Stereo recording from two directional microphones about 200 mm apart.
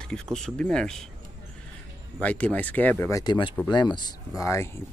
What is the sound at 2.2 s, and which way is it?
Speech, 5° left (ahead or behind).